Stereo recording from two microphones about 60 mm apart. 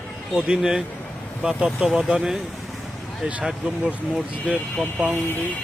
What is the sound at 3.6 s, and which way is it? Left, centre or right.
Speech, right.